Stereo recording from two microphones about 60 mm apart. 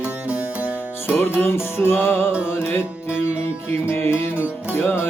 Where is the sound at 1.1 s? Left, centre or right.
Left.